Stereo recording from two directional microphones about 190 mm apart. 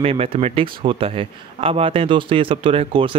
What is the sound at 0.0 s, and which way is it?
A man's voice, 30° right (ahead or behind).